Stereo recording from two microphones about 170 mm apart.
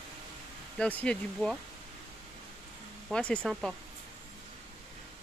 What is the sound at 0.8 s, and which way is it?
Speech, 10° left (ahead or behind).